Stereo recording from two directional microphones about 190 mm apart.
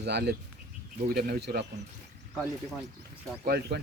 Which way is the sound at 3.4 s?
55° right (ahead or behind).